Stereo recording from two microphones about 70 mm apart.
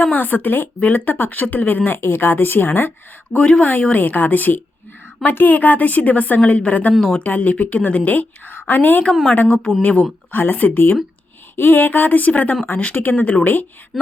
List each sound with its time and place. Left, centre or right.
0.0 s a woman's voice: left
3.3 s a woman's voice: centre
6.9 s speech: centre
7.2 s a woman's voice: left
13.9 s speech: centre